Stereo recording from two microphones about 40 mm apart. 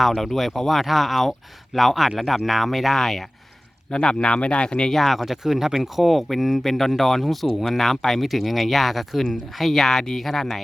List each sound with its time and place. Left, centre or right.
0.0 s speech: centre
4.0 s speech: left
4.9 s speech: centre